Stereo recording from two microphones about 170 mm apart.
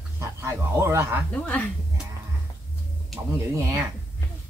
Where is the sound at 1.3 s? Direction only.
10° left (ahead or behind).